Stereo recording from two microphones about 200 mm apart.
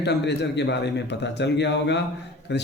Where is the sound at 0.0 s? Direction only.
60° left (ahead or behind).